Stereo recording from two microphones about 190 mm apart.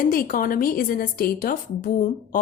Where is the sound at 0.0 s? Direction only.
50° left (ahead or behind).